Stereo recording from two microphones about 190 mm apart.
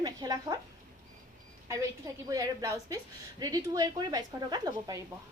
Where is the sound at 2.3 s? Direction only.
15° right (ahead or behind).